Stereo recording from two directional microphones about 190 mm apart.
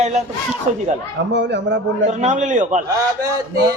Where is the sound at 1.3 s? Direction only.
70° right (ahead or behind).